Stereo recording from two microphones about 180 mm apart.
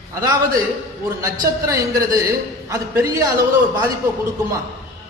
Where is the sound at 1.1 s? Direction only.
20° right (ahead or behind).